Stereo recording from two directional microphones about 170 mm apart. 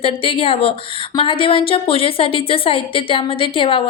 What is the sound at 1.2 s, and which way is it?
A woman's voice, 30° left (ahead or behind).